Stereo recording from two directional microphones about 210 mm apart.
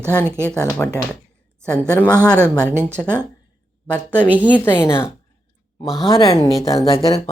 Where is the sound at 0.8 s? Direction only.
10° left (ahead or behind).